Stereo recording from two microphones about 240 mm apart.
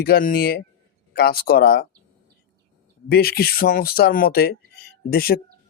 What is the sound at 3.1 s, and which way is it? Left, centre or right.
Speech, left.